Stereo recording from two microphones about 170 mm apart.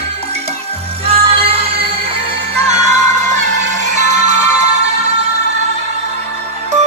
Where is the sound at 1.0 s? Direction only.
35° right (ahead or behind).